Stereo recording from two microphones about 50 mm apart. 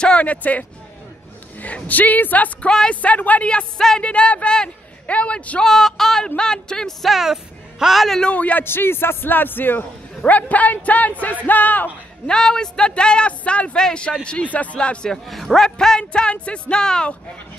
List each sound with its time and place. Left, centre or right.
0.0 s a man's voice: left
3.4 s a man's voice: centre
5.6 s a man's voice: centre
7.1 s speech: centre
8.2 s a man's voice: left
8.6 s a man's voice: left
12.3 s a man's voice: centre
15.0 s a man's voice: centre
16.1 s a man's voice: left